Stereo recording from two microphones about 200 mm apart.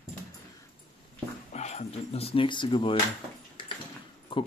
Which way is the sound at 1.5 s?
35° left (ahead or behind).